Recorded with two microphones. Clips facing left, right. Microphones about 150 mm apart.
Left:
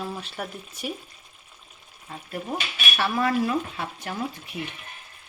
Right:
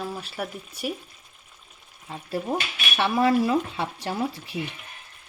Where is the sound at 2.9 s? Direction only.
20° right (ahead or behind).